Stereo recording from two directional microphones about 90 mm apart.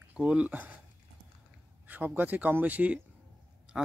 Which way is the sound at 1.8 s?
20° right (ahead or behind).